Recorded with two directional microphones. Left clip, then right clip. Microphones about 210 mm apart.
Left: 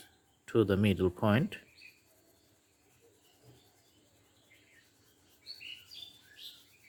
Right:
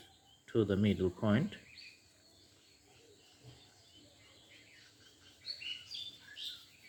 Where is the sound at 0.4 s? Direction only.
40° left (ahead or behind).